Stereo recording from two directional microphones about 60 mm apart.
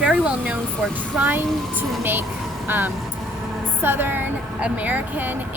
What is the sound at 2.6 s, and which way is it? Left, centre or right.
A woman's voice, right.